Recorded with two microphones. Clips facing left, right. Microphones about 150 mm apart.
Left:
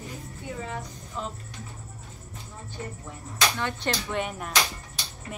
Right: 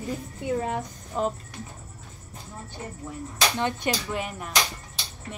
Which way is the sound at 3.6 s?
15° right (ahead or behind).